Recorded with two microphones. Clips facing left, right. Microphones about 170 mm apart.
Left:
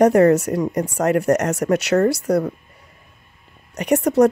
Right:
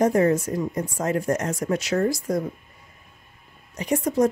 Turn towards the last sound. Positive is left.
turn(degrees=70)  # may be behind; listen again after turning